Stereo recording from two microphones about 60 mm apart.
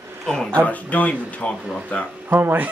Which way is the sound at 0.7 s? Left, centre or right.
Left.